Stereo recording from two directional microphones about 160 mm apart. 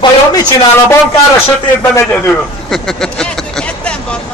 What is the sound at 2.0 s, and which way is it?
Speech, 15° left (ahead or behind).